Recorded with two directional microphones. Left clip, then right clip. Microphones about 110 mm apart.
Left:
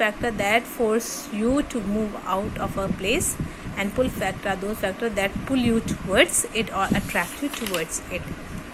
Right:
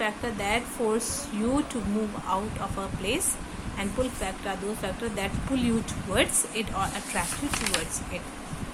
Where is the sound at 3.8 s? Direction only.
45° left (ahead or behind).